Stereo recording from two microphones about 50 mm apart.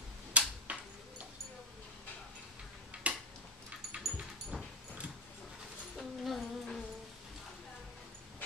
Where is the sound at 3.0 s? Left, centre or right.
Right.